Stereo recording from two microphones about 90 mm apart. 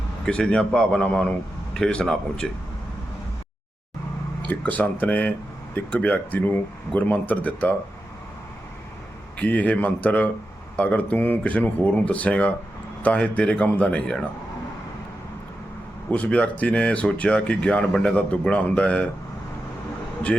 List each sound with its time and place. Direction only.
0.3 s speech: 10° left (ahead or behind)
4.4 s speech: 15° left (ahead or behind)
9.4 s speech: 15° left (ahead or behind)
16.0 s speech: 15° left (ahead or behind)